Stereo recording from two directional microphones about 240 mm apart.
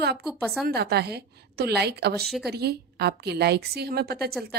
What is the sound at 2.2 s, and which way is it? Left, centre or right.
Speech, centre.